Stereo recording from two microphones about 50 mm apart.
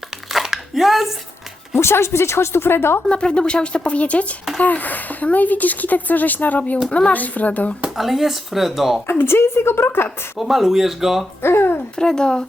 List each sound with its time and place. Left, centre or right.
0.3 s a sound: centre
1.7 s speech: left
3.1 s speech: centre
7.9 s speech: centre
9.0 s a woman's voice: left
10.3 s speech: centre
11.4 s a woman's voice: left
11.9 s speech: centre